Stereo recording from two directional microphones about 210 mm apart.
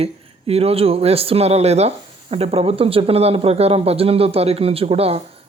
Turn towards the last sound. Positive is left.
turn(degrees=-30)  # may be behind; listen again after turning